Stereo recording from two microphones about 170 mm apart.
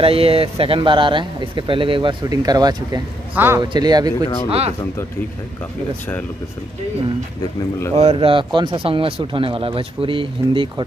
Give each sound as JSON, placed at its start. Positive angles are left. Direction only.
{"t": 0.0, "sound": "a man's voice", "side_deg": -35}
{"t": 3.6, "sound": "speech", "side_deg": -25}
{"t": 4.5, "sound": "speech", "side_deg": -35}
{"t": 7.9, "sound": "speech", "side_deg": -35}